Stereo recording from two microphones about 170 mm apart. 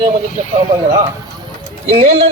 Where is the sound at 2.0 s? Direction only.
35° right (ahead or behind).